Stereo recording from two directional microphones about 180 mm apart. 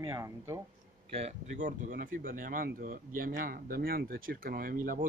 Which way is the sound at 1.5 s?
45° right (ahead or behind).